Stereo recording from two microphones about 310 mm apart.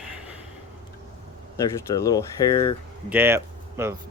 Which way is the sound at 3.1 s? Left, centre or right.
Centre.